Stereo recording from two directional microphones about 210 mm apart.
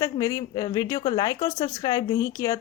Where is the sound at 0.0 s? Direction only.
15° left (ahead or behind).